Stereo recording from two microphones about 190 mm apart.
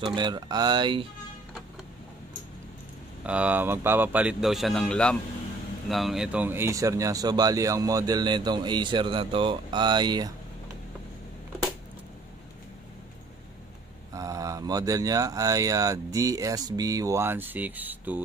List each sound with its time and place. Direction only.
0.0 s speech: 25° right (ahead or behind)
3.3 s speech: 5° right (ahead or behind)
14.1 s speech: 20° right (ahead or behind)